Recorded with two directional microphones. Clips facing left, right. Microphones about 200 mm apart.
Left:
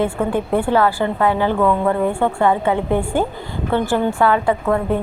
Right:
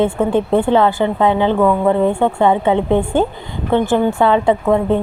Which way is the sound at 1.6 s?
10° right (ahead or behind).